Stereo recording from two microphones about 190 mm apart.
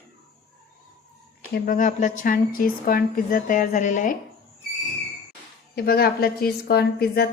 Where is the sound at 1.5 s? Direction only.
45° left (ahead or behind).